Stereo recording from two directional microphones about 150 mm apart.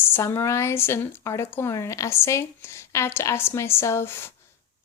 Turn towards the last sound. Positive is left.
turn(degrees=15)  # may be behind; listen again after turning